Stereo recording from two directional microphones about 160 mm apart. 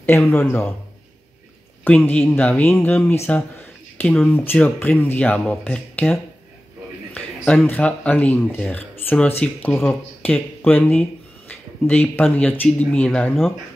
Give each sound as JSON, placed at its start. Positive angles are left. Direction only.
{"t": 0.0, "sound": "speech", "side_deg": 15}
{"t": 1.9, "sound": "speech", "side_deg": 10}
{"t": 7.2, "sound": "speech", "side_deg": 10}